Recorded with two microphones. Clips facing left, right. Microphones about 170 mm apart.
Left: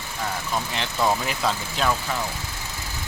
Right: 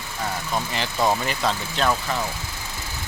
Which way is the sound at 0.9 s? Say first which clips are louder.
Right 1 dB; 5° right (ahead or behind).